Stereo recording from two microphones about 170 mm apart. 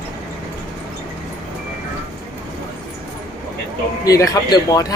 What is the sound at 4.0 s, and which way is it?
Speech, 20° left (ahead or behind).